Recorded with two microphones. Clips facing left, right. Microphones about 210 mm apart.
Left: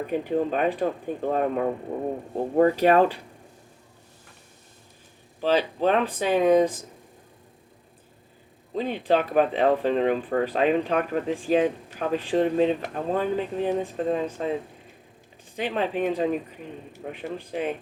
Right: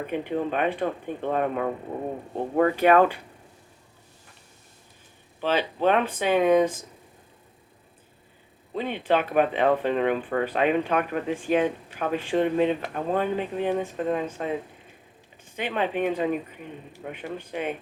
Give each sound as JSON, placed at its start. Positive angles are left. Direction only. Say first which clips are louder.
{"t": 0.1, "sound": "speech", "louder": "left 3 dB", "side_deg": 40}
{"t": 5.4, "sound": "speech", "louder": "left 2 dB", "side_deg": 40}
{"t": 8.7, "sound": "speech", "louder": "left 1 dB", "side_deg": 40}
{"t": 15.5, "sound": "speech", "louder": "left 1 dB", "side_deg": 40}